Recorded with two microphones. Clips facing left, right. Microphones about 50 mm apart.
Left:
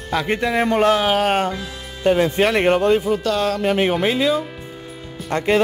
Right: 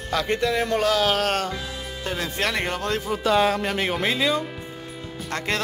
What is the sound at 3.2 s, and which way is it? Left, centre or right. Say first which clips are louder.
Speech: even; centre.